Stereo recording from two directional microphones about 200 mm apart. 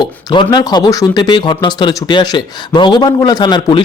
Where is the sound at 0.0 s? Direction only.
20° left (ahead or behind).